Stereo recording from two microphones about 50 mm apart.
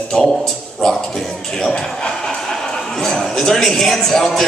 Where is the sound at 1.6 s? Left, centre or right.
Centre.